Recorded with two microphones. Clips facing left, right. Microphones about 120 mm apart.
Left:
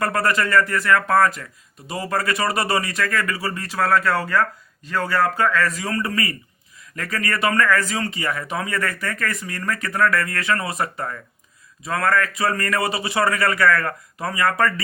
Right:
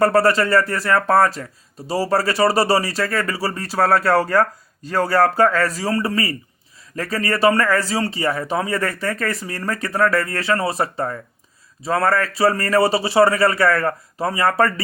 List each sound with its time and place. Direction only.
0.0 s speech: 30° right (ahead or behind)